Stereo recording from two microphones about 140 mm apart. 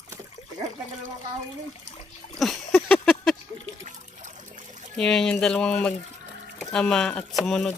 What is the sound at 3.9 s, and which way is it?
Trickle, 60° right (ahead or behind).